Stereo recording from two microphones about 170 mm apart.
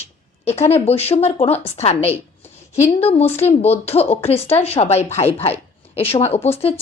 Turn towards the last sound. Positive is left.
turn(degrees=40)  # may be behind; listen again after turning